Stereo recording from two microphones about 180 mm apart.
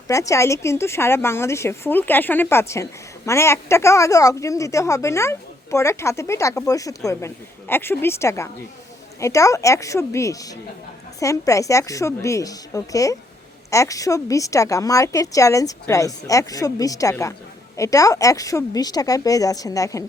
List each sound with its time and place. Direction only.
0.1 s speech: 15° left (ahead or behind)